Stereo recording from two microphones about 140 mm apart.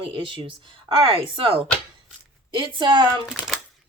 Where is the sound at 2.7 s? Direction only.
35° right (ahead or behind).